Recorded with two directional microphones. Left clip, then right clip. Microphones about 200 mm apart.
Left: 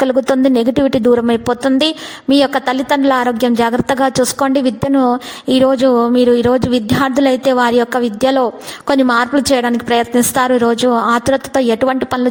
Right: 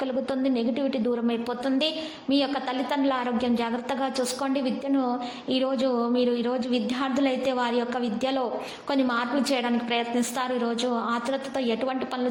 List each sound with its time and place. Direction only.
0.0 s a woman's voice: 45° left (ahead or behind)